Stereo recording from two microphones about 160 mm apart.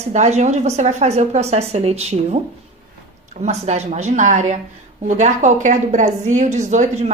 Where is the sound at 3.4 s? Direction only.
45° right (ahead or behind).